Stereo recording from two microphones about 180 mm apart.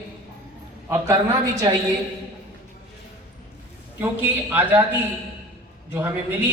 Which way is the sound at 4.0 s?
10° right (ahead or behind).